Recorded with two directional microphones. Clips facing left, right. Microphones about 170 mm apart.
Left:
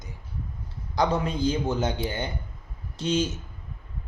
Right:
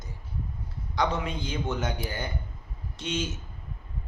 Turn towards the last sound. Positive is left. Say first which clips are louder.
# left 6 dB
turn(degrees=35)  # may be behind; listen again after turning